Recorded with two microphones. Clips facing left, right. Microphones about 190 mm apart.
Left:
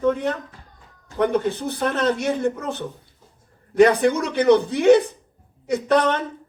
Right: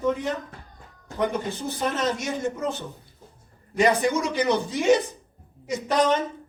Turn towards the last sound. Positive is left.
turn(degrees=60)  # may be behind; listen again after turning